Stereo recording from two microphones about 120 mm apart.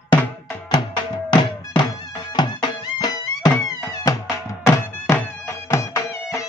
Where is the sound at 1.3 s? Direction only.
40° left (ahead or behind).